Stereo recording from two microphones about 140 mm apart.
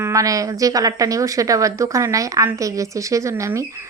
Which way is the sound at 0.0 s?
25° right (ahead or behind).